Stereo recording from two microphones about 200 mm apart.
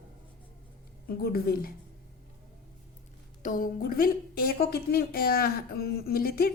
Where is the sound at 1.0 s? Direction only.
50° left (ahead or behind).